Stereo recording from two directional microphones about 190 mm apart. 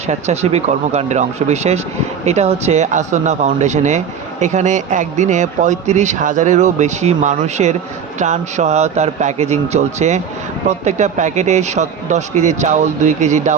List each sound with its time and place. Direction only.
0.1 s speech: 35° right (ahead or behind)